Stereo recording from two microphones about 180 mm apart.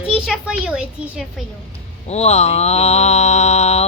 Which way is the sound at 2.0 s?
35° left (ahead or behind).